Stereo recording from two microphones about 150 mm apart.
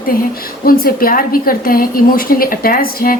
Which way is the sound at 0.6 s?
75° left (ahead or behind).